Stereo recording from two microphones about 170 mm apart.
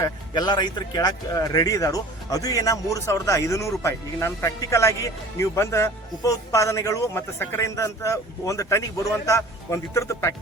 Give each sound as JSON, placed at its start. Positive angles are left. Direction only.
{"t": 0.0, "sound": "speech", "side_deg": 25}